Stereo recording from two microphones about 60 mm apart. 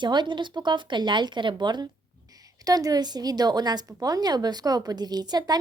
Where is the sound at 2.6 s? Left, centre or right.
Right.